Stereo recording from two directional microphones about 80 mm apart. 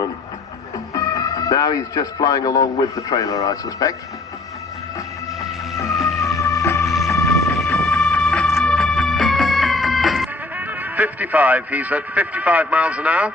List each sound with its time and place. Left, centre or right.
0.9 s a man's voice: left
5.9 s music: centre
6.4 s music: left
6.8 s music: centre
7.7 s music: centre
10.6 s a man's voice: right